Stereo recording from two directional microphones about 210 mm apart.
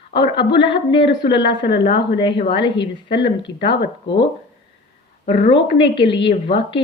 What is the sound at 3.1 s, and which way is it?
Speech, 25° left (ahead or behind).